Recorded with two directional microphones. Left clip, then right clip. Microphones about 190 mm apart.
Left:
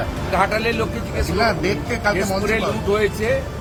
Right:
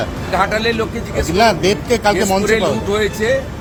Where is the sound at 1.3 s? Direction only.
50° right (ahead or behind).